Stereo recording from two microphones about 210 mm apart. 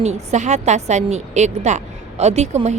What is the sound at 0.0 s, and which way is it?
A woman's voice, 30° right (ahead or behind).